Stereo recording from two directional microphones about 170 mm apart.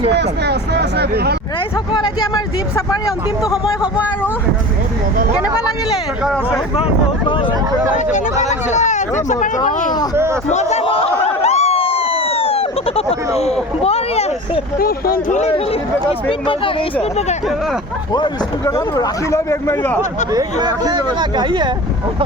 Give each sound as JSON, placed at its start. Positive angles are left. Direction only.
{"t": 0.1, "sound": "speech", "side_deg": -75}
{"t": 2.0, "sound": "speech", "side_deg": 25}
{"t": 3.5, "sound": "speech", "side_deg": -5}
{"t": 6.2, "sound": "speech", "side_deg": 0}
{"t": 6.7, "sound": "speech", "side_deg": 30}
{"t": 8.7, "sound": "speech", "side_deg": 45}
{"t": 10.5, "sound": "speech", "side_deg": 40}
{"t": 14.8, "sound": "speech", "side_deg": 60}
{"t": 15.4, "sound": "speech", "side_deg": 40}
{"t": 18.1, "sound": "speech", "side_deg": 25}
{"t": 20.3, "sound": "speech", "side_deg": -20}